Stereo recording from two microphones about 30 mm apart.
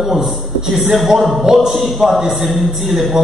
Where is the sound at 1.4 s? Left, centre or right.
Centre.